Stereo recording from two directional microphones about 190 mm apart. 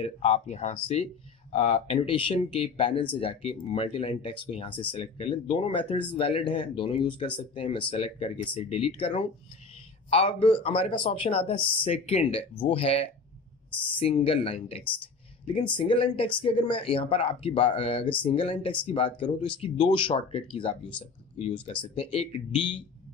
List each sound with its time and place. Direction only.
0.0 s speech: 35° left (ahead or behind)
14.9 s a sound: 25° left (ahead or behind)
15.9 s speech: 30° left (ahead or behind)